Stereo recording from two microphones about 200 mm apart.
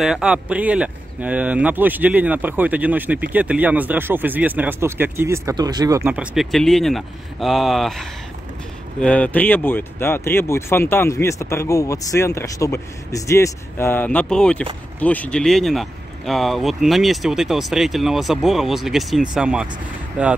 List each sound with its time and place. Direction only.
0.0 s speech: 5° right (ahead or behind)
9.0 s speech: 5° left (ahead or behind)